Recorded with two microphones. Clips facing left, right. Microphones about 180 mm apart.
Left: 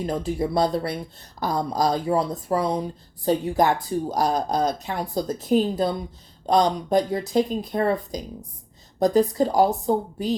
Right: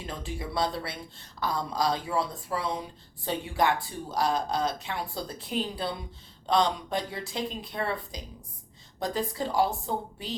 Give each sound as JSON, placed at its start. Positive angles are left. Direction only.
{"t": 0.0, "sound": "speech", "side_deg": 40}